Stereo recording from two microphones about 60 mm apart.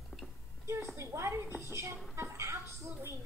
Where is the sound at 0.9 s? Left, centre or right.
Right.